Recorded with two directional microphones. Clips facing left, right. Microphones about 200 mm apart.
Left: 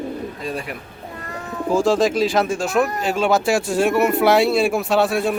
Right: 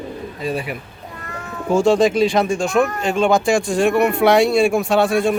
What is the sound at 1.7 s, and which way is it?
Speech, centre (ahead or behind).